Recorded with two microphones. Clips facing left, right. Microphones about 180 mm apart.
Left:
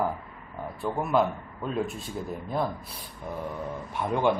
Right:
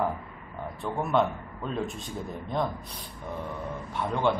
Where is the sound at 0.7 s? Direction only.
5° left (ahead or behind).